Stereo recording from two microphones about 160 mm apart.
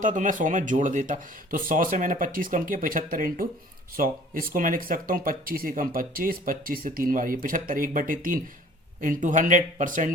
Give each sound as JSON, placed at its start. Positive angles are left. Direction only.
{"t": 0.0, "sound": "speech", "side_deg": -55}